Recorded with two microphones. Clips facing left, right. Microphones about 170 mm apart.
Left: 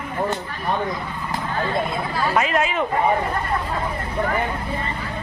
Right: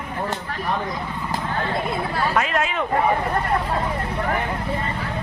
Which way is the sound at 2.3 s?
5° left (ahead or behind).